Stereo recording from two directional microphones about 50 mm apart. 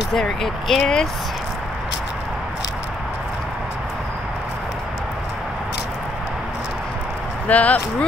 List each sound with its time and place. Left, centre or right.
0.1 s speech: centre
7.4 s speech: left